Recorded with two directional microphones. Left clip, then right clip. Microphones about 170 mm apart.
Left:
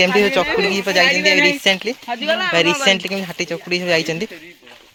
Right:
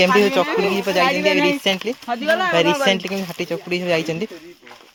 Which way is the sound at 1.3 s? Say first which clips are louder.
Left 3 dB; 55° right (ahead or behind).